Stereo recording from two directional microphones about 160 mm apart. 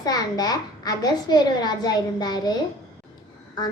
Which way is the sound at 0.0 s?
25° left (ahead or behind).